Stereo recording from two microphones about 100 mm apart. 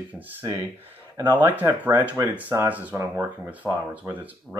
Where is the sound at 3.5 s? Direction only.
15° right (ahead or behind).